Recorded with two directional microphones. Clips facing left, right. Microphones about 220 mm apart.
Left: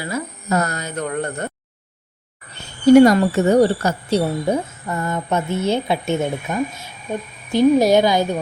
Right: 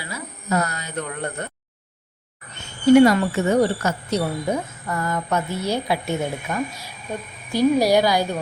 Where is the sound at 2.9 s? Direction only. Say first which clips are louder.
Left 3 dB; 40° left (ahead or behind).